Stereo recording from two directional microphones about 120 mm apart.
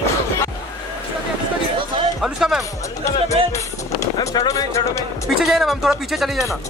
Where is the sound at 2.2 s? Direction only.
5° right (ahead or behind).